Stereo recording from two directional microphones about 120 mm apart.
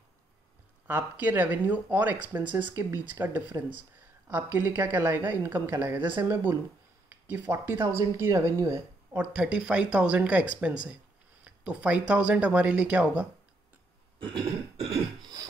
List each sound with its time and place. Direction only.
0.8 s speech: 15° right (ahead or behind)
7.1 s a sound: 15° right (ahead or behind)
7.9 s speech: 30° right (ahead or behind)
9.2 s speech: 10° right (ahead or behind)
11.4 s speech: 10° right (ahead or behind)
14.2 s throat clearing: 50° right (ahead or behind)